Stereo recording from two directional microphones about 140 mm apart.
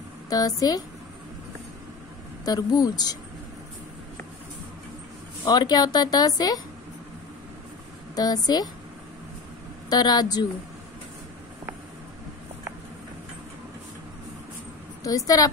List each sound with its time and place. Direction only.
0.3 s speech: 25° left (ahead or behind)
2.4 s speech: 30° left (ahead or behind)
5.4 s speech: 30° left (ahead or behind)
8.2 s speech: 30° left (ahead or behind)
9.8 s speech: 30° left (ahead or behind)
15.0 s speech: 25° left (ahead or behind)